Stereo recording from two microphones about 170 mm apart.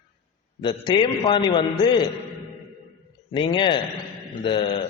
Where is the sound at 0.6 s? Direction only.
25° left (ahead or behind).